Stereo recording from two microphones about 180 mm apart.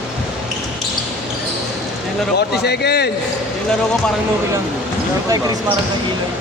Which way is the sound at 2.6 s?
65° left (ahead or behind).